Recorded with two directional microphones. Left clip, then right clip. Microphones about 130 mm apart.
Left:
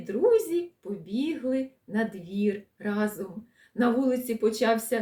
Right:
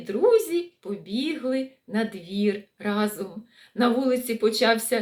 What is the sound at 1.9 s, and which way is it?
Speech, 25° left (ahead or behind).